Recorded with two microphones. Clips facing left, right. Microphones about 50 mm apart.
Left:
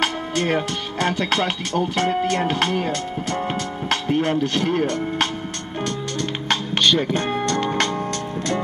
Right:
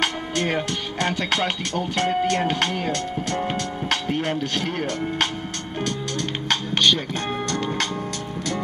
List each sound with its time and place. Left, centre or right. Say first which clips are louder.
0.0 s speech: left 2 dB; centre
6.5 s music: left 1 dB; centre
7.5 s music: left 4 dB; left